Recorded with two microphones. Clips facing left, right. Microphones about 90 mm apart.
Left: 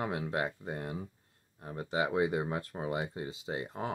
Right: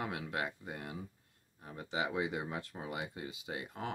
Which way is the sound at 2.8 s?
30° left (ahead or behind).